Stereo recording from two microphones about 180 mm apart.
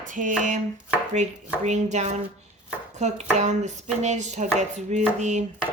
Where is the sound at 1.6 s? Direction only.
40° right (ahead or behind).